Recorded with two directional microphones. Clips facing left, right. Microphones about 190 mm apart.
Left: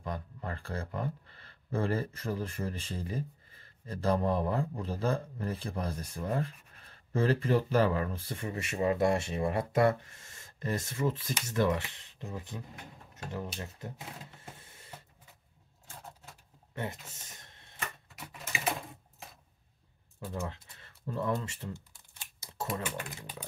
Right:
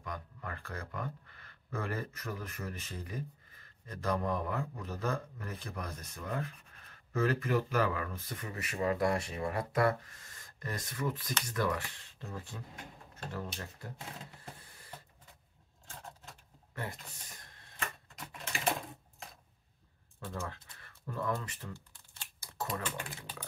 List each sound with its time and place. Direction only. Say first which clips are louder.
0.0 s speech: left 5 dB; 30° left (ahead or behind)
16.7 s speech: left 4 dB; 20° left (ahead or behind)
17.7 s typewriter: even; 5° left (ahead or behind)
20.2 s speech: left 3 dB; 15° left (ahead or behind)
20.8 s speech: left 3 dB; 25° left (ahead or behind)
22.4 s a sound: left 1 dB; 25° left (ahead or behind)